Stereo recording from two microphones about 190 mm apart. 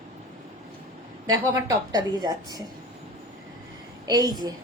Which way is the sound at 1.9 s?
20° right (ahead or behind).